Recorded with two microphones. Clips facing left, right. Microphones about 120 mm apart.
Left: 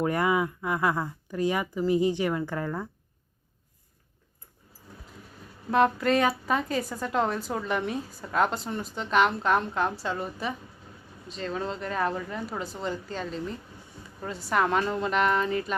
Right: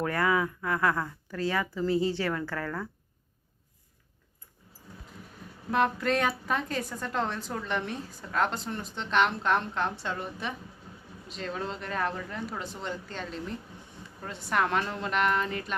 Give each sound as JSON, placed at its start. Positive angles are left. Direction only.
{"t": 0.0, "sound": "speech", "side_deg": 20}
{"t": 5.7, "sound": "a woman's voice", "side_deg": 0}